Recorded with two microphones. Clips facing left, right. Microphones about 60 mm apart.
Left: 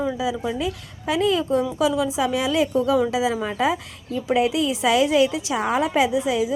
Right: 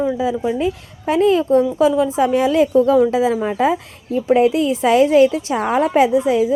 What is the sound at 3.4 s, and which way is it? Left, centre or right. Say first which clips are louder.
A woman's voice: right 5 dB; right.